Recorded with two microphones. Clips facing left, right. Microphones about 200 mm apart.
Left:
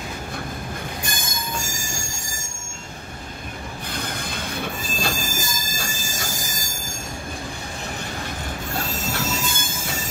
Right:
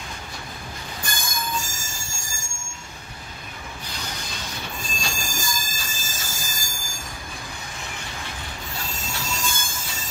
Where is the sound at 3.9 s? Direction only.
55° left (ahead or behind).